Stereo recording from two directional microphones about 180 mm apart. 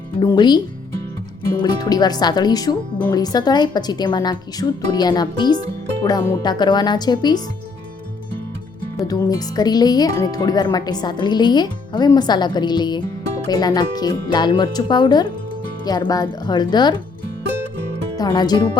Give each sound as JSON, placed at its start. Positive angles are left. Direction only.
{"t": 0.2, "sound": "speech", "side_deg": 25}
{"t": 1.6, "sound": "speech", "side_deg": 20}
{"t": 9.0, "sound": "speech", "side_deg": 20}
{"t": 18.2, "sound": "speech", "side_deg": 20}